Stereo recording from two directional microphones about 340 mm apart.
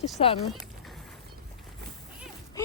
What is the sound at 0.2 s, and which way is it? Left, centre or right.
Speech, centre.